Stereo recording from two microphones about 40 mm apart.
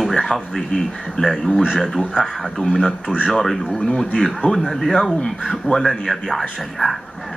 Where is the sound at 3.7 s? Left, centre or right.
Centre.